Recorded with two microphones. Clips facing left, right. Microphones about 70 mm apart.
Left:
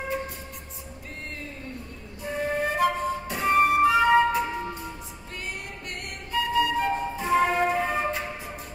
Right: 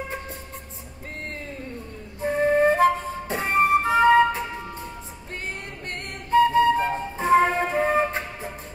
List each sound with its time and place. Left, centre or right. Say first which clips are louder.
2.2 s flute: right 8 dB; right
3.8 s music: right 2 dB; right
5.9 s music: right 11 dB; right
7.7 s flute: right 4 dB; right